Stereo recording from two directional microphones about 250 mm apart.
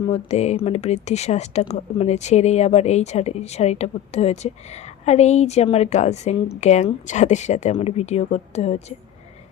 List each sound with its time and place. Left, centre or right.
0.1 s speech: left